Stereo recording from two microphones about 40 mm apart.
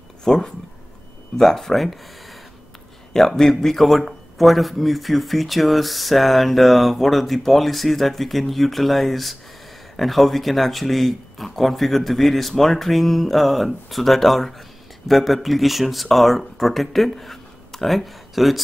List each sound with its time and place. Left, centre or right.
0.2 s speech: centre
1.4 s speech: centre
3.1 s speech: centre